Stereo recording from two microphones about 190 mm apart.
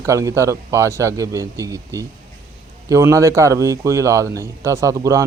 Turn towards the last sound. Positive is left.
turn(degrees=-15)  # may be behind; listen again after turning